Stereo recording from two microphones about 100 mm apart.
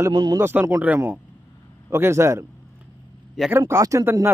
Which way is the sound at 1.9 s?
25° right (ahead or behind).